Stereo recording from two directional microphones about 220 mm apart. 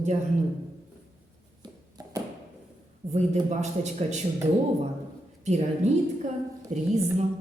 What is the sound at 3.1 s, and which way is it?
Speech, 30° right (ahead or behind).